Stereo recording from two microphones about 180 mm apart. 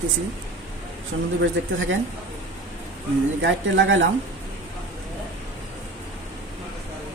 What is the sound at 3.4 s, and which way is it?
Speech, 90° right.